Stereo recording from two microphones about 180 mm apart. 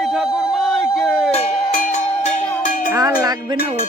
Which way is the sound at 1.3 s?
40° left (ahead or behind).